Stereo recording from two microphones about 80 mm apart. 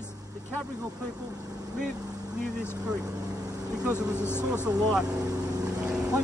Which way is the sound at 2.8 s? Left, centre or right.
Right.